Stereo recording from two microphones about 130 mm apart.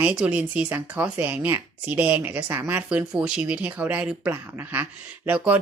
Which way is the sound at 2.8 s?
10° right (ahead or behind).